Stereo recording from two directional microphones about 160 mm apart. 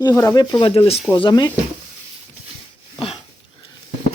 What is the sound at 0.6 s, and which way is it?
Speech, 35° left (ahead or behind).